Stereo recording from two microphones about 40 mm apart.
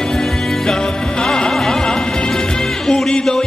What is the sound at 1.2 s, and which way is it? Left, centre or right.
Music, centre.